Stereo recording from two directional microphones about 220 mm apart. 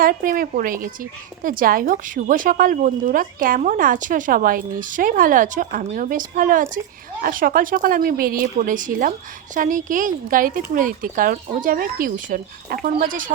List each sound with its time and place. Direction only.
0.0 s speech: 40° right (ahead or behind)